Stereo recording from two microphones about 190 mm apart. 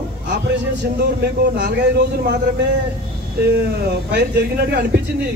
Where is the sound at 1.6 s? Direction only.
60° right (ahead or behind).